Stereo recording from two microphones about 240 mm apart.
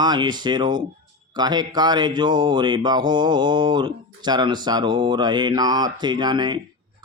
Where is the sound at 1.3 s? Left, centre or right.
Centre.